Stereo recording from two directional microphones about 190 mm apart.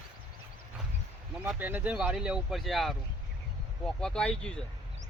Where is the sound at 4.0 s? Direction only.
5° left (ahead or behind).